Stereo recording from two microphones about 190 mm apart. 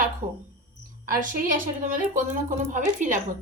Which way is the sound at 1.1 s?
45° right (ahead or behind).